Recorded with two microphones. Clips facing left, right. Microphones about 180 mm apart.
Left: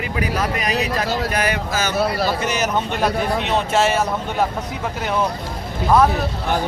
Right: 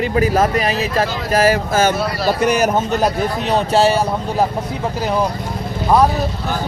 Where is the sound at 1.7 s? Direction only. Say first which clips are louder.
Right 4 dB; 50° right (ahead or behind); by 4.4 s 35° right (ahead or behind).